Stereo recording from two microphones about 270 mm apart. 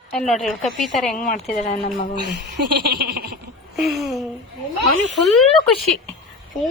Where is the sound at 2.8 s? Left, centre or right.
Right.